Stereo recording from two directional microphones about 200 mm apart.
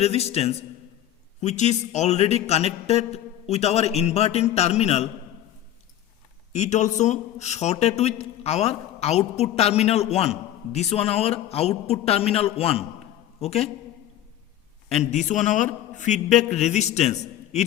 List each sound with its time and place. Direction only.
0.0 s a man's voice: 30° left (ahead or behind)
6.5 s a man's voice: 35° left (ahead or behind)
14.8 s a man's voice: 35° left (ahead or behind)